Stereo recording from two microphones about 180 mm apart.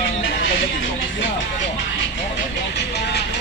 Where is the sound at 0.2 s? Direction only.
90° left.